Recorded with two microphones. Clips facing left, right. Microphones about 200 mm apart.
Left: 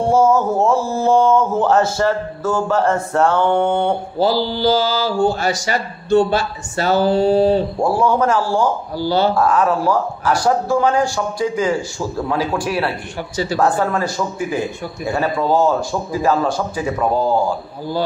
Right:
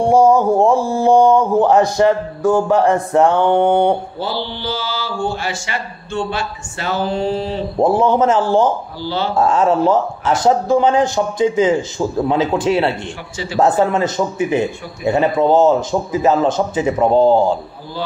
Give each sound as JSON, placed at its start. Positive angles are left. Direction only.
{"t": 0.0, "sound": "speech", "side_deg": -15}
{"t": 4.2, "sound": "speech", "side_deg": 40}
{"t": 7.8, "sound": "speech", "side_deg": -20}
{"t": 9.0, "sound": "speech", "side_deg": 40}
{"t": 9.3, "sound": "speech", "side_deg": -25}